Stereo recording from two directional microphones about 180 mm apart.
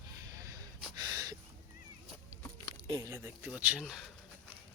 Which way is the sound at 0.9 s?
20° right (ahead or behind).